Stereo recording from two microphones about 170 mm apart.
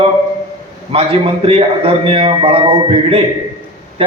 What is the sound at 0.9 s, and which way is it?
A man's voice, 35° right (ahead or behind).